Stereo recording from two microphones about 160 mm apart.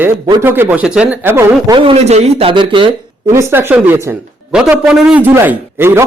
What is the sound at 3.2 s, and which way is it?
Speech, 15° right (ahead or behind).